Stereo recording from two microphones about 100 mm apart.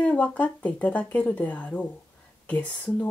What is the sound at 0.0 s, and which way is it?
Speech, 15° left (ahead or behind).